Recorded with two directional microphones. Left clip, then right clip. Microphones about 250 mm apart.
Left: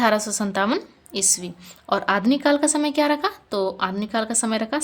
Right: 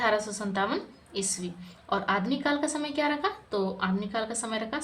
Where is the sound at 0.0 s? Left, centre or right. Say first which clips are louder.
Left 6 dB; left.